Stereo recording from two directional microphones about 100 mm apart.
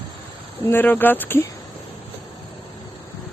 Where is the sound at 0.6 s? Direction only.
20° left (ahead or behind).